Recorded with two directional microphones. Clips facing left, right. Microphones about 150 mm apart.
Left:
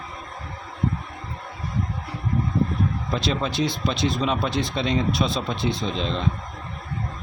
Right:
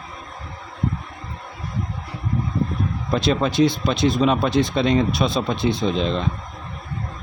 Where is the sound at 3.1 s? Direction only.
50° right (ahead or behind).